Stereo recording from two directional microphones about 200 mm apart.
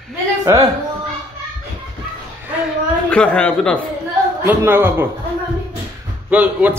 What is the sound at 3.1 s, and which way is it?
Speech, 5° left (ahead or behind).